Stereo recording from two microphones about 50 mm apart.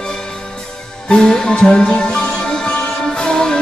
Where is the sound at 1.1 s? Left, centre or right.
Centre.